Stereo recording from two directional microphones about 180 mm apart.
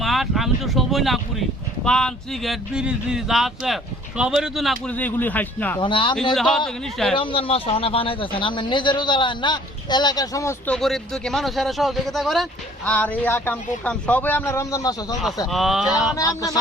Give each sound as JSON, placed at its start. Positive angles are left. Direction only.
{"t": 0.0, "sound": "speech", "side_deg": 0}
{"t": 5.8, "sound": "speech", "side_deg": 25}
{"t": 6.3, "sound": "speech", "side_deg": 5}
{"t": 7.2, "sound": "speech", "side_deg": 30}
{"t": 10.7, "sound": "speech", "side_deg": 0}
{"t": 15.4, "sound": "speech", "side_deg": 0}
{"t": 16.1, "sound": "speech", "side_deg": 20}